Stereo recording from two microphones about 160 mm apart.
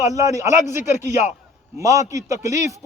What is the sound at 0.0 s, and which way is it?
A man's voice, 20° right (ahead or behind).